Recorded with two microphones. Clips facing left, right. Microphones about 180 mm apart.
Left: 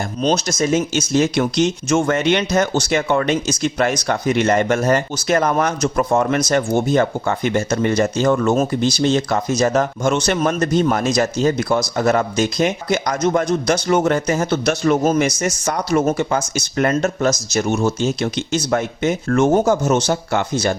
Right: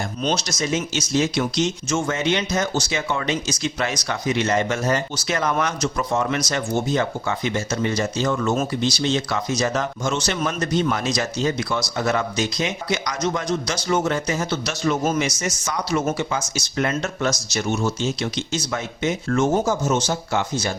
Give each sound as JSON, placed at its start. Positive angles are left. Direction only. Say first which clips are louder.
{"t": 0.2, "sound": "speech", "louder": "left 7 dB", "side_deg": 45}
{"t": 15.0, "sound": "speech", "louder": "left 5 dB", "side_deg": 40}
{"t": 15.3, "sound": "speech", "louder": "left 6 dB", "side_deg": 55}